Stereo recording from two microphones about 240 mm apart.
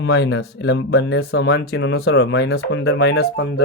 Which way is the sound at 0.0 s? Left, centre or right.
Left.